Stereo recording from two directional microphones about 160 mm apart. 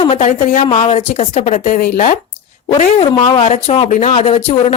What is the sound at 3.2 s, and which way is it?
A woman's voice, 45° left (ahead or behind).